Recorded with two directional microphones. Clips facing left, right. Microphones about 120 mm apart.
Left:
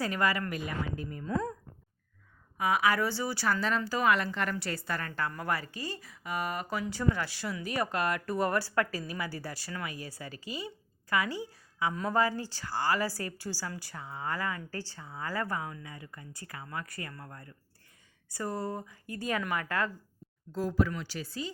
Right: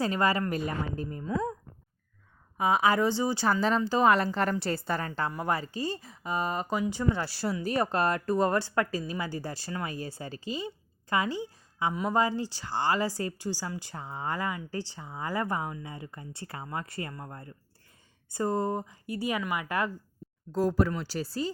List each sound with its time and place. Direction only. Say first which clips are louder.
0.0 s a woman's voice: right 3 dB; 25° right (ahead or behind)
2.6 s a woman's voice: right 3 dB; 25° right (ahead or behind)
7.2 s a woman's voice: right 4 dB; 35° right (ahead or behind); by 19.9 s 15° right (ahead or behind)
20.5 s speech: right 4 dB; 40° right (ahead or behind)